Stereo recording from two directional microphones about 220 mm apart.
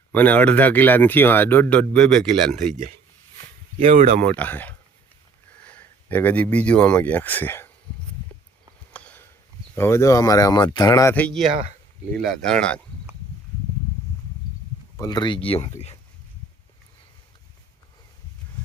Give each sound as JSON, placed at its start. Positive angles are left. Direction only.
{"t": 0.1, "sound": "speech", "side_deg": 5}
{"t": 3.8, "sound": "speech", "side_deg": -30}
{"t": 4.3, "sound": "speech", "side_deg": 10}
{"t": 8.9, "sound": "a sound", "side_deg": 5}
{"t": 9.7, "sound": "speech", "side_deg": 10}
{"t": 11.1, "sound": "speech", "side_deg": 5}
{"t": 14.9, "sound": "speech", "side_deg": 15}